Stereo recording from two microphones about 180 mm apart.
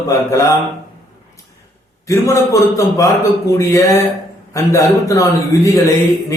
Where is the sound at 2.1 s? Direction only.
15° left (ahead or behind).